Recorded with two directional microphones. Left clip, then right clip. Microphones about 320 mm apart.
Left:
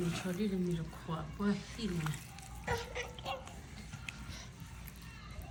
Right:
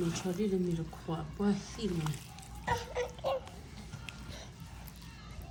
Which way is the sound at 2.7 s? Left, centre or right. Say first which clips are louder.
Right 5 dB; right.